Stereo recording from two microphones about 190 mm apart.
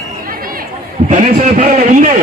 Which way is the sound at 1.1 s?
40° right (ahead or behind).